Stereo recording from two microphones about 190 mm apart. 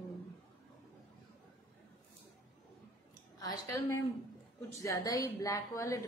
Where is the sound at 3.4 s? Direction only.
20° left (ahead or behind).